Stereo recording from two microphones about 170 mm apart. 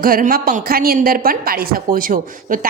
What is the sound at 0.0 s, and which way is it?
A woman's voice, 55° right (ahead or behind).